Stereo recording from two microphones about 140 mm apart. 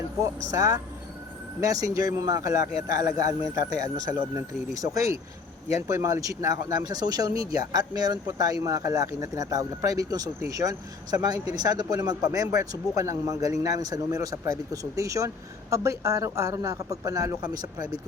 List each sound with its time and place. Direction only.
0.5 s a man's voice: 25° right (ahead or behind)